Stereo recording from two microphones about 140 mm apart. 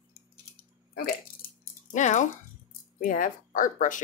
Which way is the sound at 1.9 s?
60° left (ahead or behind).